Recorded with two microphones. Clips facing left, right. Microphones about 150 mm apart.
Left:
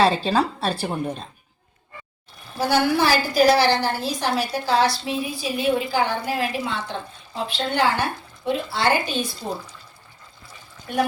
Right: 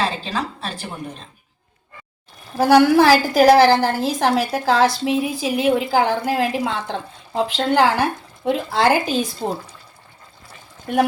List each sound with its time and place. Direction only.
0.0 s a woman's voice: 35° left (ahead or behind)
2.6 s a woman's voice: 90° right